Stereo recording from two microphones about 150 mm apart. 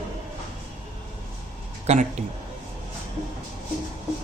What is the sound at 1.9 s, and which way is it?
Speech, 45° right (ahead or behind).